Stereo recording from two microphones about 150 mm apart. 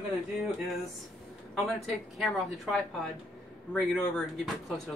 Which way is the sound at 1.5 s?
Centre (ahead or behind).